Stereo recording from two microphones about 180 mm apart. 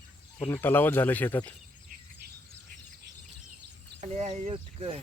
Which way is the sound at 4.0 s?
40° right (ahead or behind).